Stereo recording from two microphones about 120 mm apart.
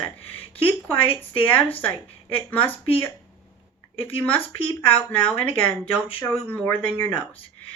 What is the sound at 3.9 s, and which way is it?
Speech, 15° left (ahead or behind).